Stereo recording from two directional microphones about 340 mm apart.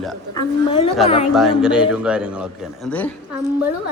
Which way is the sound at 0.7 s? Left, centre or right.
Centre.